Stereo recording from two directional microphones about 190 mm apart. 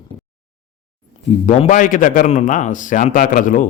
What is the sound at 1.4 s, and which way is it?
A man's voice, 40° left (ahead or behind).